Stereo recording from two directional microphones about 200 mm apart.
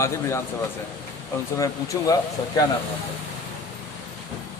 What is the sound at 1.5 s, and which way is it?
Speech, 15° left (ahead or behind).